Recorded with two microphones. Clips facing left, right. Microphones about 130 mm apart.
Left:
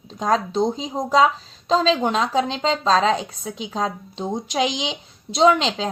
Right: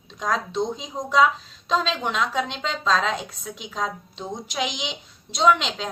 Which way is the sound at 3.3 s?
50° left (ahead or behind).